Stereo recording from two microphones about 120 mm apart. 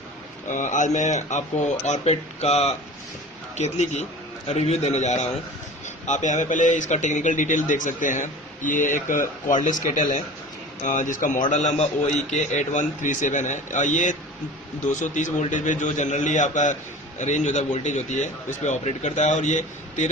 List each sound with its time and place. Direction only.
0.5 s a man's voice: 90° left
1.8 s a man's voice: 70° left (ahead or behind)
6.1 s a man's voice: 90° left